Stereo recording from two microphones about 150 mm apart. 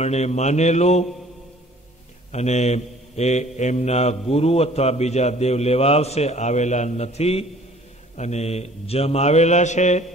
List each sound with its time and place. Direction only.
0.0 s speech: 45° left (ahead or behind)
2.3 s speech: 50° left (ahead or behind)